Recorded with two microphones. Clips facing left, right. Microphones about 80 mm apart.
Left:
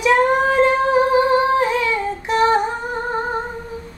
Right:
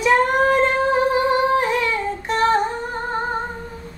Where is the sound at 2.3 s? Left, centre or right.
Centre.